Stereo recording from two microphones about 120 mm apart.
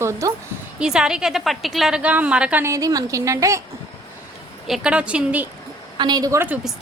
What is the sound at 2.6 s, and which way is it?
A woman's voice, 25° right (ahead or behind).